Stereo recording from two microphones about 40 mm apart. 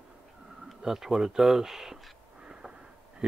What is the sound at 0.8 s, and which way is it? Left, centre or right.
Speech, centre.